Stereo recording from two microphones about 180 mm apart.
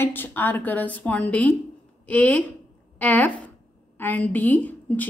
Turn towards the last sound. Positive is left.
turn(degrees=10)  # may be behind; listen again after turning